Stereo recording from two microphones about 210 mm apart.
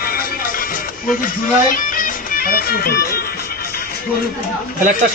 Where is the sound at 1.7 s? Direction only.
40° left (ahead or behind).